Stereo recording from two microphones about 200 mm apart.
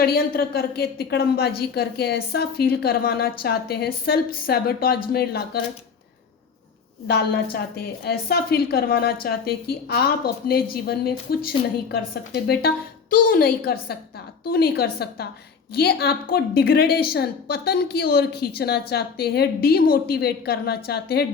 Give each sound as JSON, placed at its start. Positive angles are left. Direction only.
{"t": 0.0, "sound": "a woman's voice", "side_deg": 50}
{"t": 8.0, "sound": "a woman's voice", "side_deg": 50}